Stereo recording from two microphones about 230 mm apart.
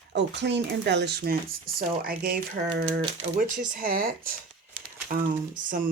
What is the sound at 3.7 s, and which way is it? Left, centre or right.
Speech, right.